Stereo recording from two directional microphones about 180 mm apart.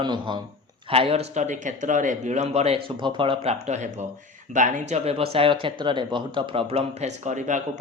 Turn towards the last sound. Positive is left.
turn(degrees=-40)  # may be behind; listen again after turning